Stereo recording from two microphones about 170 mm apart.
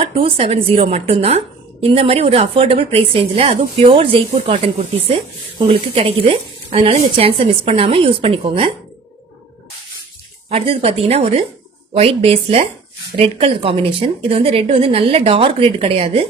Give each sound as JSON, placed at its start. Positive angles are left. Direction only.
{"t": 0.0, "sound": "a woman's voice", "side_deg": -35}
{"t": 10.5, "sound": "a woman's voice", "side_deg": -35}